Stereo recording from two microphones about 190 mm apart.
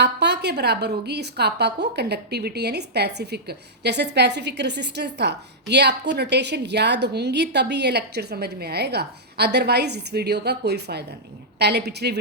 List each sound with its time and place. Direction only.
0.0 s a woman's voice: 60° right (ahead or behind)